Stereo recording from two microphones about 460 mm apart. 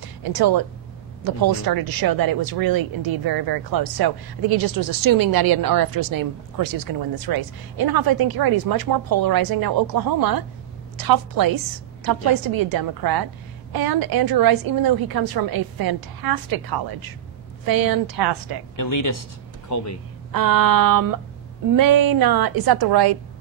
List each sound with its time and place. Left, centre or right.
0.2 s speech: right
18.8 s speech: left
20.3 s speech: right